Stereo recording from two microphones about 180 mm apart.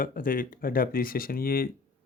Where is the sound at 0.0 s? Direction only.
50° left (ahead or behind).